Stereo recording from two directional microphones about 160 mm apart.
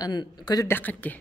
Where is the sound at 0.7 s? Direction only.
10° left (ahead or behind).